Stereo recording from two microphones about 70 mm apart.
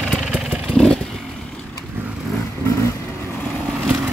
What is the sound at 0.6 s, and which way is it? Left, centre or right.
Vehicle, centre.